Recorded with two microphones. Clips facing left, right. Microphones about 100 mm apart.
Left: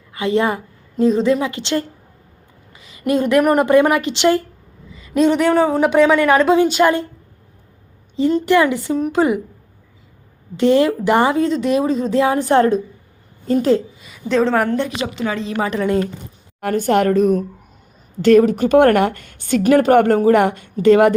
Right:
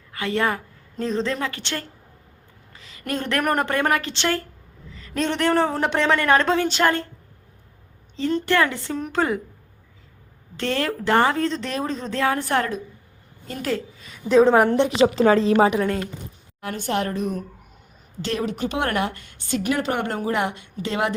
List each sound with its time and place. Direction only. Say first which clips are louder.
0.1 s a woman's voice: left 6 dB; 20° left (ahead or behind)
8.1 s a woman's voice: left 7 dB; 15° left (ahead or behind)
10.6 s a woman's voice: left 11 dB; 15° left (ahead or behind)
14.3 s a woman's voice: right 1 dB; 10° right (ahead or behind)
14.7 s a woman's voice: right 3 dB; 25° right (ahead or behind)
16.6 s speech: left 9 dB; 50° left (ahead or behind)